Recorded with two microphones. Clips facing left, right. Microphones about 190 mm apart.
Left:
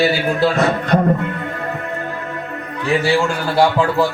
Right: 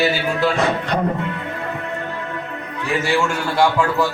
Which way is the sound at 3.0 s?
35° left (ahead or behind).